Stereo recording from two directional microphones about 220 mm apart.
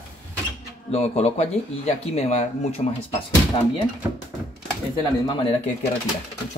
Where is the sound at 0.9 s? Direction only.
30° left (ahead or behind).